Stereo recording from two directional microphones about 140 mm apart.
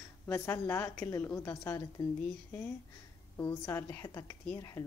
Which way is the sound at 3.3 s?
20° left (ahead or behind).